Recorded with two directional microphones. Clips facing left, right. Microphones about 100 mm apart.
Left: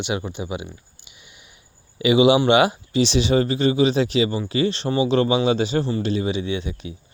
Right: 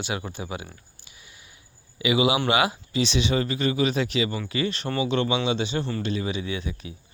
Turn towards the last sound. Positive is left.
turn(degrees=30)  # may be behind; listen again after turning